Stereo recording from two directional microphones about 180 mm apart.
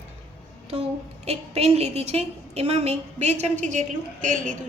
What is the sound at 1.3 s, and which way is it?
A woman's voice, 35° right (ahead or behind).